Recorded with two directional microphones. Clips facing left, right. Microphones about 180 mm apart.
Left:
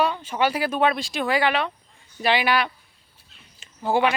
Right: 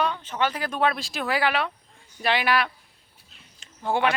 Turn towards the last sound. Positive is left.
turn(degrees=5)  # may be behind; listen again after turning